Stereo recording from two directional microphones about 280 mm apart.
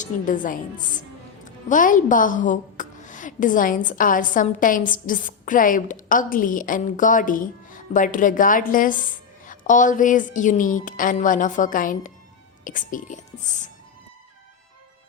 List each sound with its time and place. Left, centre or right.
0.0 s a woman's voice: left